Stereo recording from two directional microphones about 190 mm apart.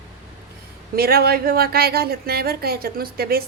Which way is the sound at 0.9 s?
55° right (ahead or behind).